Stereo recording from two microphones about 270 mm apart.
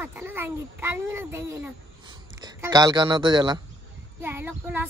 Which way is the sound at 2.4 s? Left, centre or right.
Centre.